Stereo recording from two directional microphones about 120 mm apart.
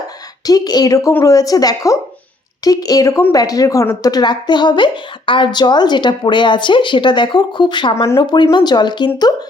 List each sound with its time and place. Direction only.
0.4 s a woman's voice: 30° left (ahead or behind)